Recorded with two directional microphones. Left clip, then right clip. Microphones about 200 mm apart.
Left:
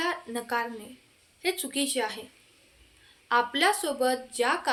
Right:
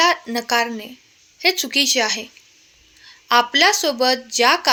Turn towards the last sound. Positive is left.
turn(degrees=-40)  # may be behind; listen again after turning